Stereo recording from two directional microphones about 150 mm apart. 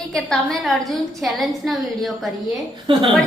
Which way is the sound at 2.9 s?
35° right (ahead or behind).